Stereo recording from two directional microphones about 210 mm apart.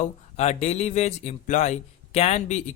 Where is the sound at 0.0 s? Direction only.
30° left (ahead or behind).